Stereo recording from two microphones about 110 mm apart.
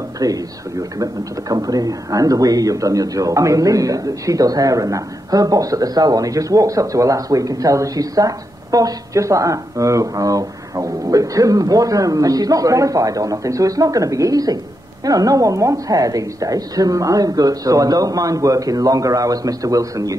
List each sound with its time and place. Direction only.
0.2 s speech: 35° right (ahead or behind)